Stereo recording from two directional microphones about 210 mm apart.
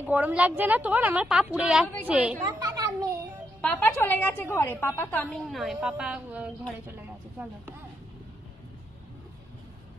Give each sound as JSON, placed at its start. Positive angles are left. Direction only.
{"t": 0.0, "sound": "a woman's voice", "side_deg": -10}
{"t": 2.4, "sound": "children playing", "side_deg": -15}
{"t": 3.6, "sound": "a woman's voice", "side_deg": 10}